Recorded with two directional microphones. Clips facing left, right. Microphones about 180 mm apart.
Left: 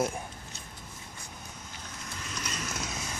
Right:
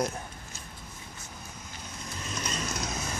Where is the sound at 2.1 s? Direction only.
25° right (ahead or behind).